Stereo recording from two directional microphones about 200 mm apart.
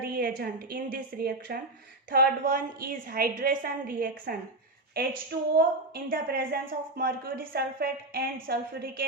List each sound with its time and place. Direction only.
0.0 s a woman's voice: 50° right (ahead or behind)